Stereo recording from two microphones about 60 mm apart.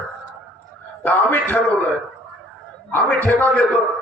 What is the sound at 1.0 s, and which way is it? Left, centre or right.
Speech, left.